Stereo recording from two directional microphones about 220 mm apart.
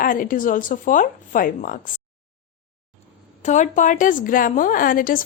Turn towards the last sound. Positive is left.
turn(degrees=40)  # may be behind; listen again after turning